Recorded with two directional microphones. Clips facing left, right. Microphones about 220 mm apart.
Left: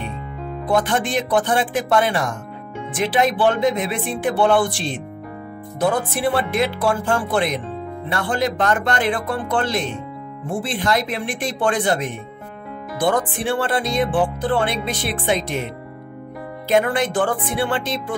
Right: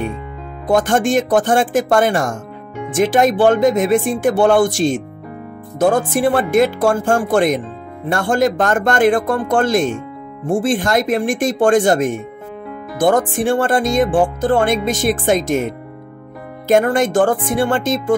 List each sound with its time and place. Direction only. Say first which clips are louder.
0.7 s speech: right 5 dB; 45° right (ahead or behind)